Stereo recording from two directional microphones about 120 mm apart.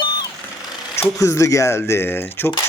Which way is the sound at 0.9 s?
25° left (ahead or behind).